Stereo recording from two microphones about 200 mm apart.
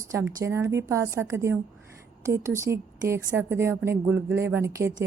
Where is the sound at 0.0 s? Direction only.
15° right (ahead or behind).